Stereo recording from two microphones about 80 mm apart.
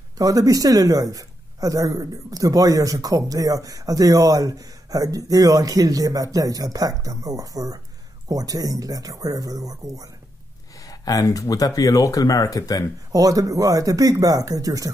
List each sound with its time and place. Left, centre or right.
0.2 s a woman's voice: right
10.8 s a sound: left
11.2 s speech: left
13.1 s a woman's voice: right